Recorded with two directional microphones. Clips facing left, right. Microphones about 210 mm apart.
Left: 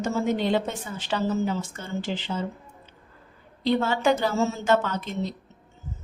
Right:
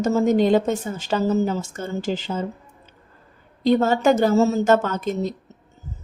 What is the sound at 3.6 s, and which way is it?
Speech, 45° right (ahead or behind).